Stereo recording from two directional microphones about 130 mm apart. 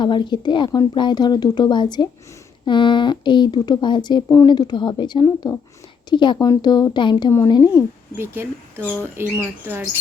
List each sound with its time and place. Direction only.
0.0 s speech: 35° left (ahead or behind)
7.7 s speech: 15° right (ahead or behind)
8.8 s speech: 10° left (ahead or behind)
9.1 s speech: 15° right (ahead or behind)